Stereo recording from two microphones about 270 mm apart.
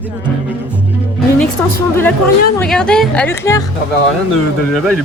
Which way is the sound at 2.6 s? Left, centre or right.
Centre.